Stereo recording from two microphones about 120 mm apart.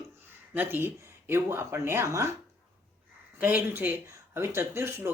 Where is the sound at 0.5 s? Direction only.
15° right (ahead or behind).